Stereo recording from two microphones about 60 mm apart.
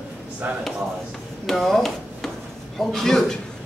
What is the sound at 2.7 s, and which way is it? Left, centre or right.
Speech, centre.